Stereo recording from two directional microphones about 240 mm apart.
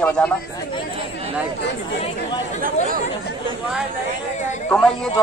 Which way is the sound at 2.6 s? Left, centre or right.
Right.